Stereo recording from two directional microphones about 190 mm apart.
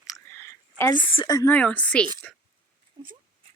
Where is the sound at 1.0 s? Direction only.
25° left (ahead or behind).